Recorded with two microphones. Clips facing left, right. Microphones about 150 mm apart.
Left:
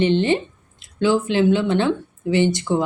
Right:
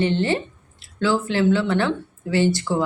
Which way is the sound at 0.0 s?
20° left (ahead or behind).